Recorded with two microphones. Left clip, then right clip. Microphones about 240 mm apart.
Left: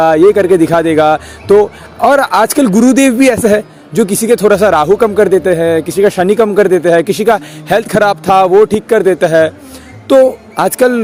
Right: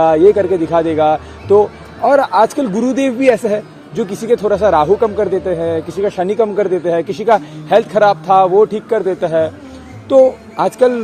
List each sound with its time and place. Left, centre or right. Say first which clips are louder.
0.0 s a man's voice: left 3 dB; left